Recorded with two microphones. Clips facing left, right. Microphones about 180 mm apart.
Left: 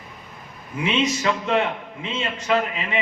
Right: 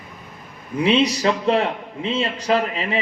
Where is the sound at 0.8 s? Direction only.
35° right (ahead or behind).